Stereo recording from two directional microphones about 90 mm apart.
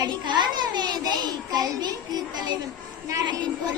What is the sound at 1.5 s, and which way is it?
A child's voice, 45° right (ahead or behind).